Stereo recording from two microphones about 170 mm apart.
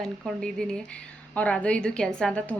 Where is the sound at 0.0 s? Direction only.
5° left (ahead or behind).